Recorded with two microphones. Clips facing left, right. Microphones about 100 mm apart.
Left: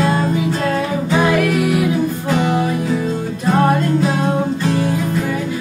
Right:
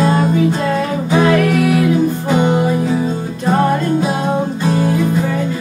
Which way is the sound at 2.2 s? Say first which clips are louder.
Right 3 dB; 25° right (ahead or behind).